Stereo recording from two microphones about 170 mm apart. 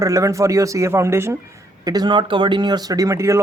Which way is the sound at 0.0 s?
20° right (ahead or behind).